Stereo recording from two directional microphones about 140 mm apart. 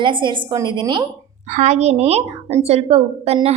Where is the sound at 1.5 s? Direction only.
55° right (ahead or behind).